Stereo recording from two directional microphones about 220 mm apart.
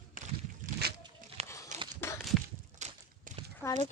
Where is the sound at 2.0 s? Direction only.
10° left (ahead or behind).